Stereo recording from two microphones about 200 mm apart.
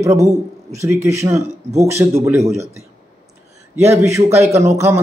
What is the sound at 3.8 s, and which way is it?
Speech, 15° right (ahead or behind).